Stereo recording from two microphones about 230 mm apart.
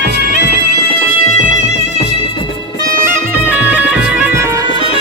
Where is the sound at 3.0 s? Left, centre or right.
Centre.